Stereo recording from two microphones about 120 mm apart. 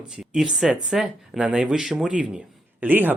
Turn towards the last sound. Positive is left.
turn(degrees=-15)  # may be behind; listen again after turning